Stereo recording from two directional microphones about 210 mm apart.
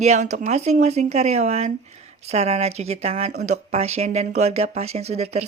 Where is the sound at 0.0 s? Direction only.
35° right (ahead or behind).